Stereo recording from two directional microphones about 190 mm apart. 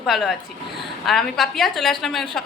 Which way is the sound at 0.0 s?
Centre (ahead or behind).